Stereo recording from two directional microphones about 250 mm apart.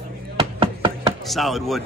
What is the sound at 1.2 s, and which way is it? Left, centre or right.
Speech, centre.